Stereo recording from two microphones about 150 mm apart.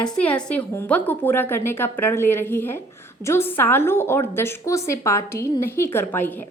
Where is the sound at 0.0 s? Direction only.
5° left (ahead or behind).